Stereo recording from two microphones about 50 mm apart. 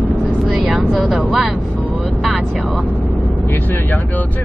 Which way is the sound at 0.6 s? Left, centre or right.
Right.